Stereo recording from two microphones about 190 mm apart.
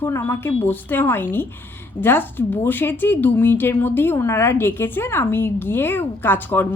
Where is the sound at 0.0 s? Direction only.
10° left (ahead or behind).